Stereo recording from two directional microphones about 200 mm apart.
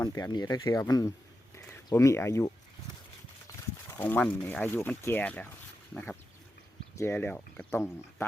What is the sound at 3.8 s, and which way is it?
Speech, 10° left (ahead or behind).